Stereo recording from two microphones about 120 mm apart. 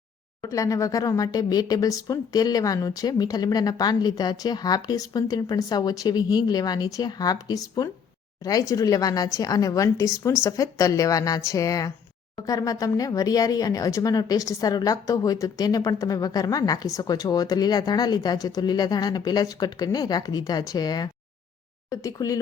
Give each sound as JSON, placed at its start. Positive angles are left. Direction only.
{"t": 0.4, "sound": "speech", "side_deg": 25}